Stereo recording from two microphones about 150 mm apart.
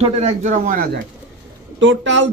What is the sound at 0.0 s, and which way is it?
Speech, 50° right (ahead or behind).